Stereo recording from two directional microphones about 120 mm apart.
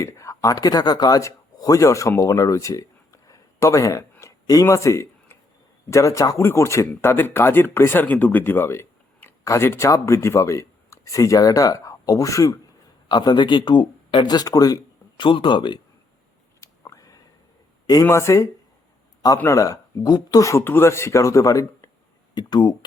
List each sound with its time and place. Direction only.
0.0 s speech: 25° left (ahead or behind)
4.1 s a sound: 25° left (ahead or behind)
5.9 s speech: 25° left (ahead or behind)
15.2 s speech: 40° left (ahead or behind)
16.6 s a sound: 25° left (ahead or behind)
18.0 s speech: 20° left (ahead or behind)